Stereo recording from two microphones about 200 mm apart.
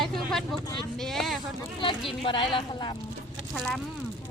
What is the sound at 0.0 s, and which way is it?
Vehicle, centre (ahead or behind).